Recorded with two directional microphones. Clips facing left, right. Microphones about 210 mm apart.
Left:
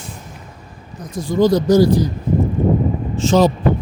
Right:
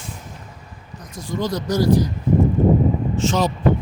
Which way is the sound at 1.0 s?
30° left (ahead or behind).